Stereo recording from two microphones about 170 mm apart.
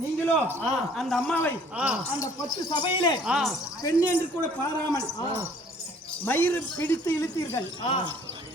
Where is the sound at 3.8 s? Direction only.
20° left (ahead or behind).